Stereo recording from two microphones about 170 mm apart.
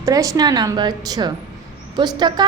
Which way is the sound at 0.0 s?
20° right (ahead or behind).